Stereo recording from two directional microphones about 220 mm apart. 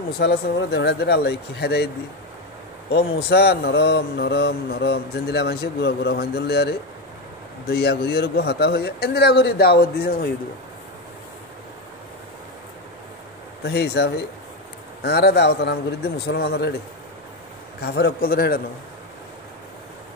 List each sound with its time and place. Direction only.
0.2 s speech: 50° left (ahead or behind)
2.9 s speech: 50° left (ahead or behind)
13.6 s speech: 50° left (ahead or behind)
17.8 s speech: 45° left (ahead or behind)